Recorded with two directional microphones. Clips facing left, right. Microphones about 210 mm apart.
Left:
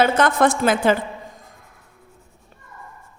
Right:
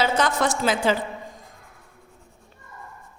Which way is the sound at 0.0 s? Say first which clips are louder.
Left 5 dB; 55° left (ahead or behind).